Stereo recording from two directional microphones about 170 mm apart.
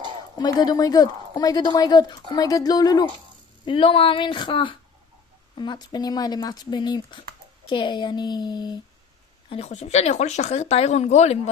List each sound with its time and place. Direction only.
0.4 s speech: 25° left (ahead or behind)
9.5 s speech: 35° left (ahead or behind)